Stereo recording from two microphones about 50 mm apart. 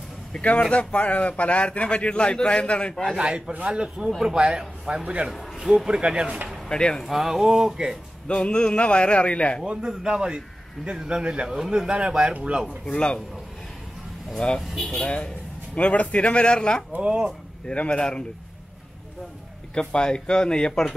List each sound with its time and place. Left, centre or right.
0.4 s a man's voice: left
3.2 s a man's voice: right
6.7 s speech: centre
7.1 s speech: centre
8.3 s a man's voice: left
9.8 s a man's voice: centre
12.9 s a man's voice: centre
14.6 s speech: centre
14.9 s a man's voice: left
16.9 s a man's voice: right
17.6 s speech: left
19.7 s speech: centre